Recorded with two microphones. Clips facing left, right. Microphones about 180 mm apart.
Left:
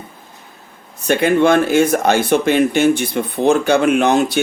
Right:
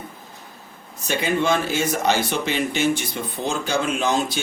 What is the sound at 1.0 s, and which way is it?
Speech, 60° left (ahead or behind).